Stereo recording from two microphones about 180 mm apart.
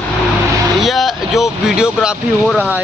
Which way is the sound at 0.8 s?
Centre (ahead or behind).